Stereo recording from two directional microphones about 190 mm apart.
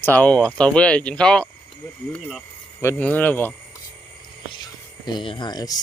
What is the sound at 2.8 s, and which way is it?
Speech, 10° left (ahead or behind).